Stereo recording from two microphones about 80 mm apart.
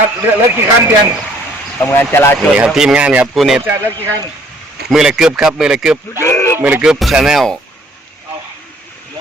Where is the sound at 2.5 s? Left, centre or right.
Centre.